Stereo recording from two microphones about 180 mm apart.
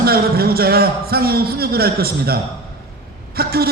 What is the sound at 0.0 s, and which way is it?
A man's voice, 60° right (ahead or behind).